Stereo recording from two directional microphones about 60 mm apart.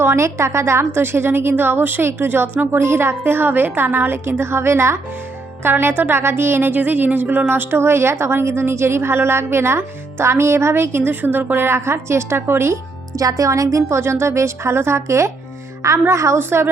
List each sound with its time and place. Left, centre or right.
0.0 s a woman's voice: right
5.6 s a woman's voice: right
7.8 s a woman's voice: right
13.1 s speech: right
14.0 s a woman's voice: right
16.4 s a woman's voice: right